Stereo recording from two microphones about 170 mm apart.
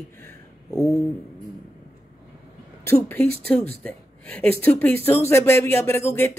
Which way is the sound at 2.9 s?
10° left (ahead or behind).